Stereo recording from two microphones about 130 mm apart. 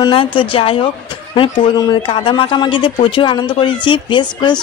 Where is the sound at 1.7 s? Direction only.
35° left (ahead or behind).